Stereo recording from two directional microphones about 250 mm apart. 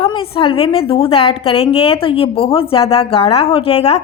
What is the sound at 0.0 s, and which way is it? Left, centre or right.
A woman's voice, left.